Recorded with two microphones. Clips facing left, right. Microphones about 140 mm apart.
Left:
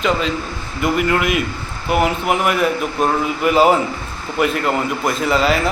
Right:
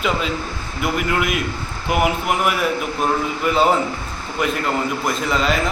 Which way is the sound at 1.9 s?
15° right (ahead or behind).